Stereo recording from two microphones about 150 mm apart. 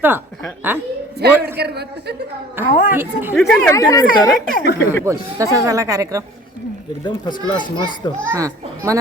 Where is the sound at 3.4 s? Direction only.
5° left (ahead or behind).